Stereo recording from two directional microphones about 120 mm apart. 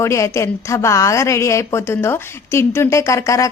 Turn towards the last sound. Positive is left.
turn(degrees=25)  # may be behind; listen again after turning